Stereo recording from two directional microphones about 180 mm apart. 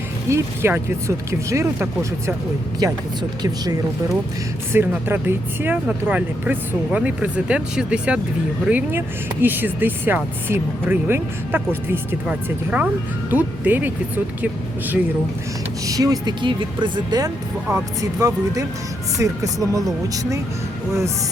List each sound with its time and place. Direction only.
0.3 s speech: 15° right (ahead or behind)
4.7 s speech: 10° right (ahead or behind)
15.9 s speech: 20° right (ahead or behind)